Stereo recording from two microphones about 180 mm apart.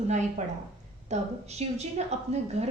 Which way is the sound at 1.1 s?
40° right (ahead or behind).